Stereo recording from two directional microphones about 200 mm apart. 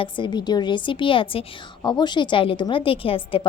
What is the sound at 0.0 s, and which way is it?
A woman's voice, 20° left (ahead or behind).